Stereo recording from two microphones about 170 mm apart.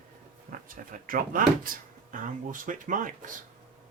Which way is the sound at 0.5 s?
55° right (ahead or behind).